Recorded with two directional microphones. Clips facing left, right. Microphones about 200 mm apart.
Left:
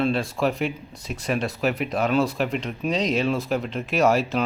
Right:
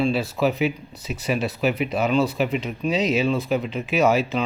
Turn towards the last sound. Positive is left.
turn(degrees=0)  # may be behind; listen again after turning